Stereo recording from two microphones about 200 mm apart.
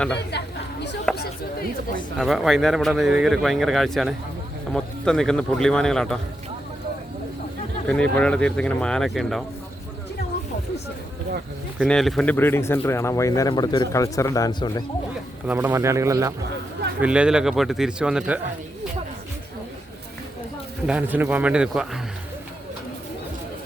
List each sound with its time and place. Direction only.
0.2 s chatter: 55° left (ahead or behind)
1.1 s a sound: 5° left (ahead or behind)
2.1 s speech: centre (ahead or behind)
7.9 s speech: 5° left (ahead or behind)
11.9 s speech: centre (ahead or behind); by 14.8 s 20° left (ahead or behind)
15.4 s speech: 10° right (ahead or behind)
20.8 s speech: 5° right (ahead or behind)